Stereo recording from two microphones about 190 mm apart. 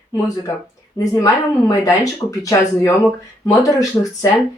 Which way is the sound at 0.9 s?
20° left (ahead or behind).